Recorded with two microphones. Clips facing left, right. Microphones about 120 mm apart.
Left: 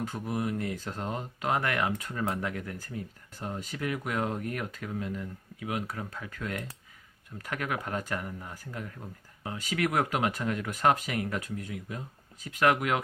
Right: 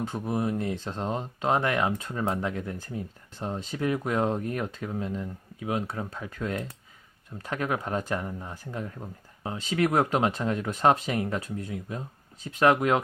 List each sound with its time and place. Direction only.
0.0 s speech: 25° right (ahead or behind)